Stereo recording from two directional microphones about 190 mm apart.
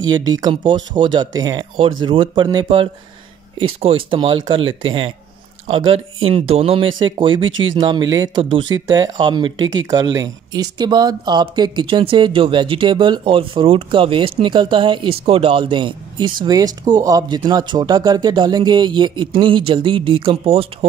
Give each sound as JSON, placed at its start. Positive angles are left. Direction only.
{"t": 0.0, "sound": "speech", "side_deg": -20}